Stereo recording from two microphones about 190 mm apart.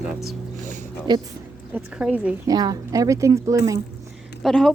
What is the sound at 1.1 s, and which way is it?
Speech, 25° right (ahead or behind).